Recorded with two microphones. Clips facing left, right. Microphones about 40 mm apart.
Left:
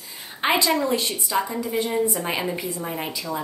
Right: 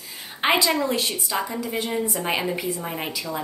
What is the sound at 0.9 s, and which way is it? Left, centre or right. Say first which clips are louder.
A woman's voice: left 1 dB; centre.